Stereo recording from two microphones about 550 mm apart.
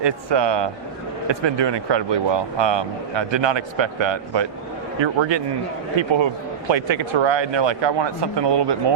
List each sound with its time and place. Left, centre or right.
0.0 s a man's voice: right
6.7 s a man's voice: right